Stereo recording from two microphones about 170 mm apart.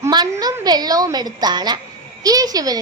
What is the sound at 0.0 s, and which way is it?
A woman's voice, 20° right (ahead or behind).